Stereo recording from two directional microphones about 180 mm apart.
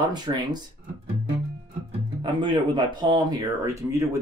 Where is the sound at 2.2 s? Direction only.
25° right (ahead or behind).